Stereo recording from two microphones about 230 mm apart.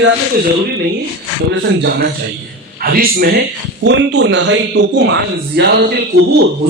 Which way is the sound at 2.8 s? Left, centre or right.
Right.